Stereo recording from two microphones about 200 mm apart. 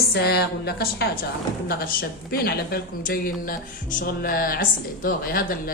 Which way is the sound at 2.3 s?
50° left (ahead or behind).